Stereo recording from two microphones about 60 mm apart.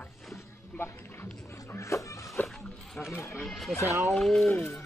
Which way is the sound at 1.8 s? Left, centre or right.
Left.